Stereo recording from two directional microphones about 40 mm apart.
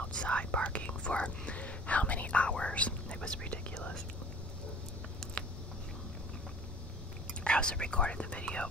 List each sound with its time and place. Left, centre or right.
0.1 s whispering: left
5.2 s a sound: centre
7.4 s speech: left